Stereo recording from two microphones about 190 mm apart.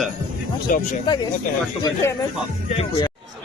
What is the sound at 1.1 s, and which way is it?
Speech, 25° left (ahead or behind).